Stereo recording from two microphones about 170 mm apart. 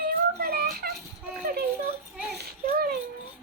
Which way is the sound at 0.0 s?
60° right (ahead or behind).